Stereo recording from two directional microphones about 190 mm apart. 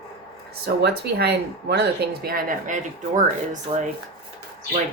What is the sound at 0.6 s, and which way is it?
Speech, 60° right (ahead or behind).